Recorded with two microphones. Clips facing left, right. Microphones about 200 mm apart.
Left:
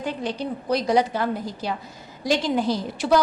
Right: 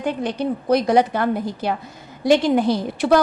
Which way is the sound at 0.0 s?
55° right (ahead or behind).